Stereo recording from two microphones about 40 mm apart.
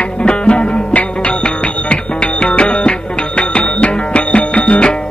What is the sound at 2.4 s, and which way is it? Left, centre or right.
Music, left.